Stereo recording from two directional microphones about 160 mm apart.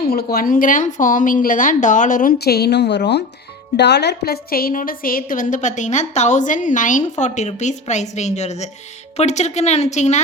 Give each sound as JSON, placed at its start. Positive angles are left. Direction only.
{"t": 0.1, "sound": "a woman's voice", "side_deg": 75}
{"t": 2.4, "sound": "a woman's voice", "side_deg": 90}